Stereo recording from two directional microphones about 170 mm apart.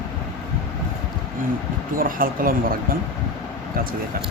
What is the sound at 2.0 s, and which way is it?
Speech, 55° right (ahead or behind).